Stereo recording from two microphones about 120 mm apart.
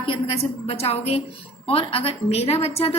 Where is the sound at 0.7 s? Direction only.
55° left (ahead or behind).